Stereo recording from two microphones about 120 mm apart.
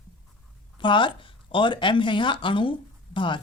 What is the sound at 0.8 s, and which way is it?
Speech, 40° left (ahead or behind).